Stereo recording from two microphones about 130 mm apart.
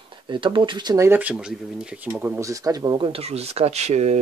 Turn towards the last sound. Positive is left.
turn(degrees=-60)  # may be behind; listen again after turning